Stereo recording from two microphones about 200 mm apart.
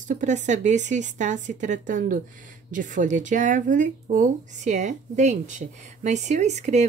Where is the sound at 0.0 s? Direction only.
40° right (ahead or behind).